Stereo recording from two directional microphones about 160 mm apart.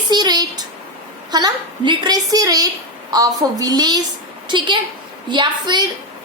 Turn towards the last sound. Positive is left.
turn(degrees=-30)  # may be behind; listen again after turning